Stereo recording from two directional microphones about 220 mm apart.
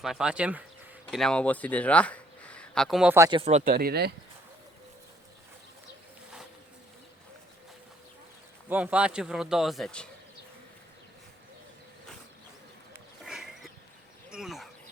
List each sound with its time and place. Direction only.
0.0 s speech: centre (ahead or behind)
3.2 s speech: 25° right (ahead or behind)
3.6 s speech: 40° right (ahead or behind)
8.7 s speech: 5° right (ahead or behind)
13.2 s a sound: centre (ahead or behind)
14.3 s speech: centre (ahead or behind)